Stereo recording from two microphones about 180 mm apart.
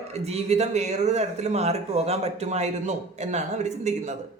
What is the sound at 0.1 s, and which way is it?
Speech, 35° right (ahead or behind).